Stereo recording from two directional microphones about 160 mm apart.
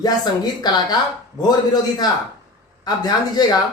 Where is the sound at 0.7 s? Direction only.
25° left (ahead or behind).